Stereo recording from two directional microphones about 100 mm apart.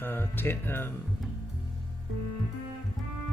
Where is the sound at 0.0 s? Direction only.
20° left (ahead or behind).